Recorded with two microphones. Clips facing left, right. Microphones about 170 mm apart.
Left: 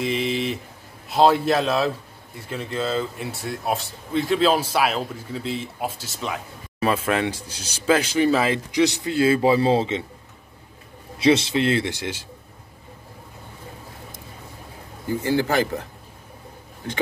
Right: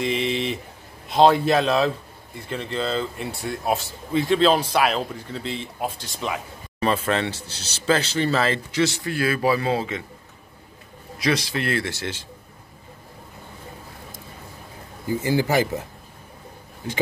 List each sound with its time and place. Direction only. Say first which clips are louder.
0.0 s a man's voice: even; centre (ahead or behind); by 10.0 s 25° left (ahead or behind)
11.1 s speech: left 6 dB; 25° left (ahead or behind)
15.0 s speech: even; 10° right (ahead or behind)
16.8 s speech: right 1 dB; 10° right (ahead or behind)